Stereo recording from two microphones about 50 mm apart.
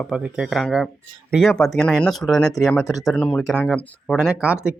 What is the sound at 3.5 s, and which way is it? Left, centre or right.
Speech, centre.